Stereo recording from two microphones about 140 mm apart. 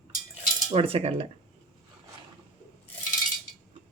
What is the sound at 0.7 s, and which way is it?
Speech, 45° right (ahead or behind).